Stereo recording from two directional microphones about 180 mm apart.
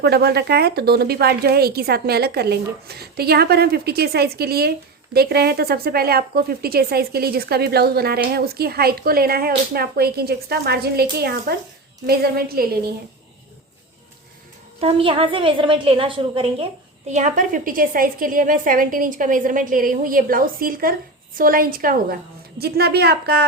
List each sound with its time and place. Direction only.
0.0 s a woman's voice: 65° right (ahead or behind)
14.8 s a woman's voice: 30° right (ahead or behind)
17.1 s a woman's voice: 40° right (ahead or behind); by 23.5 s 60° right (ahead or behind)